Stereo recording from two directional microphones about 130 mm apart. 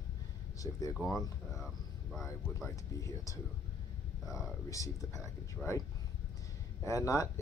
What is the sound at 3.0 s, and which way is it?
Speech, 25° left (ahead or behind).